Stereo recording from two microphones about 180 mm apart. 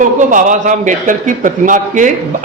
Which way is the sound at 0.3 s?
45° right (ahead or behind).